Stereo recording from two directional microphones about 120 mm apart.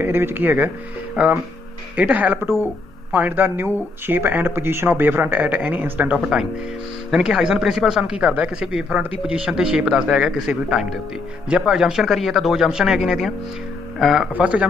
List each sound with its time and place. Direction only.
0.0 s speech: 20° right (ahead or behind)